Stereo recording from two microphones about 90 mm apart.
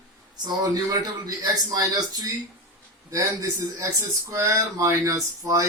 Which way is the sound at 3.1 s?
40° right (ahead or behind).